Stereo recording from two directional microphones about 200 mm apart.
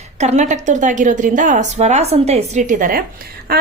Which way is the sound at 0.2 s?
35° right (ahead or behind).